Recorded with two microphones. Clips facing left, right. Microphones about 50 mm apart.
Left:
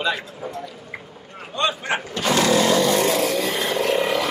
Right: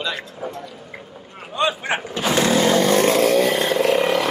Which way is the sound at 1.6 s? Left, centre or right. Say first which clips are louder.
Right 2 dB; centre.